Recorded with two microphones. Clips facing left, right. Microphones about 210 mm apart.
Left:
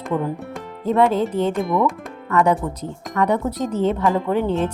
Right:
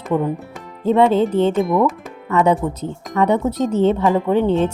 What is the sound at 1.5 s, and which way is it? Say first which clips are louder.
Speech: right 3 dB; centre (ahead or behind).